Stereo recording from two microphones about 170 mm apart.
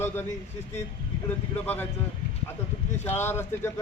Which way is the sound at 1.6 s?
10° left (ahead or behind).